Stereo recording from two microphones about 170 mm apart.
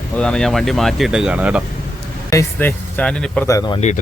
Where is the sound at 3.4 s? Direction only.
20° left (ahead or behind).